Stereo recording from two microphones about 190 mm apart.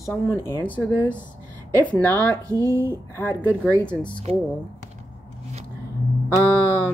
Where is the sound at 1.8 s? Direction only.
10° left (ahead or behind).